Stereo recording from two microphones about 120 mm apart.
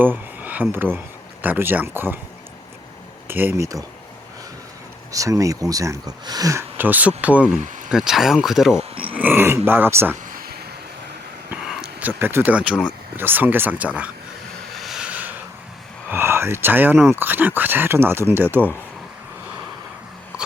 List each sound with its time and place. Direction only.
0.0 s speech: 15° right (ahead or behind)
3.2 s speech: 20° right (ahead or behind)
5.1 s speech: 30° right (ahead or behind); by 8.8 s 5° right (ahead or behind)
8.8 s speech: 50° right (ahead or behind)
9.1 s speech: 15° right (ahead or behind)
11.5 s a sound: 10° right (ahead or behind)
12.8 s speech: 15° right (ahead or behind)
14.8 s a sound: 5° right (ahead or behind)
16.0 s speech: 20° right (ahead or behind)